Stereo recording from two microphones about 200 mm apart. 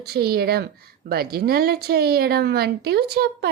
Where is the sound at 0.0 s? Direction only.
50° right (ahead or behind).